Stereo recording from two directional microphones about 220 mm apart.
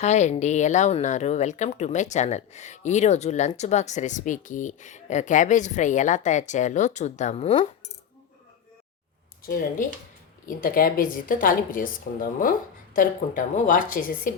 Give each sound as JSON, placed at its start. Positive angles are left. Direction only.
{"t": 0.0, "sound": "speech", "side_deg": 30}
{"t": 10.6, "sound": "speech", "side_deg": 40}